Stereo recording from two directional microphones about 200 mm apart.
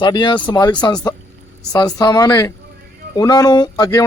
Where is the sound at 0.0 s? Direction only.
20° left (ahead or behind).